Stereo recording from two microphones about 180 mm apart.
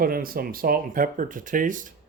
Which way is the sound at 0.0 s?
55° right (ahead or behind).